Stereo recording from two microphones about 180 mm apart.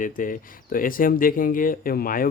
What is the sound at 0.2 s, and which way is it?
Speech, 50° left (ahead or behind).